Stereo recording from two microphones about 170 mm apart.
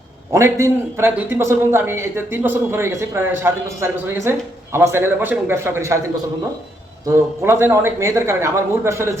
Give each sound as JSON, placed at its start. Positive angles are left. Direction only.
{"t": 0.3, "sound": "a man's voice", "side_deg": -15}
{"t": 7.0, "sound": "a man's voice", "side_deg": -15}